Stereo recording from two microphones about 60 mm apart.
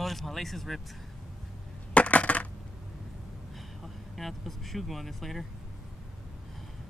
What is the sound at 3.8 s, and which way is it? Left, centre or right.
Speech, centre.